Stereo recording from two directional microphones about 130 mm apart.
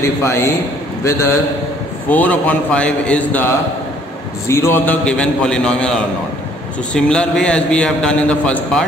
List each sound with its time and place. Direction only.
0.0 s a man's voice: 20° left (ahead or behind)
5.0 s a man's voice: 10° left (ahead or behind)